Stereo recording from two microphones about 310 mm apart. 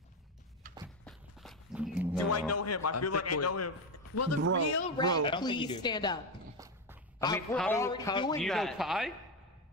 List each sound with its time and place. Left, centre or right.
0.7 s a sound: right
1.0 s a sound: centre
2.1 s a man's voice: left
4.8 s a man's voice: centre
7.2 s a man's voice: centre
8.4 s speech: centre